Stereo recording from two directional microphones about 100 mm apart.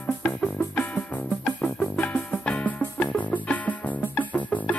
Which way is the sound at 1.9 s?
15° left (ahead or behind).